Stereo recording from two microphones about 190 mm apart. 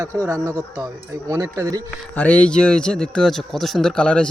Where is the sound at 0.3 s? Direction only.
15° right (ahead or behind).